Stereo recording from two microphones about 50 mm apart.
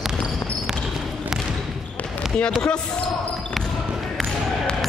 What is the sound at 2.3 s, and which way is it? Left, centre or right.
Speech, left.